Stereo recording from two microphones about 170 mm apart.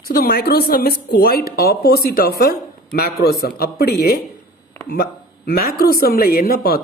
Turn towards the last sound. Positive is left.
turn(degrees=65)  # may be behind; listen again after turning